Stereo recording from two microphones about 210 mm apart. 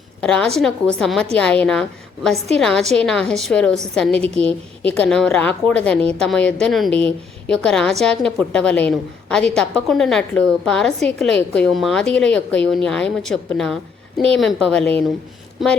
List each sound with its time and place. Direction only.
0.2 s a woman's voice: 5° left (ahead or behind)
4.2 s a woman's voice: 30° right (ahead or behind)
4.8 s a woman's voice: 5° left (ahead or behind)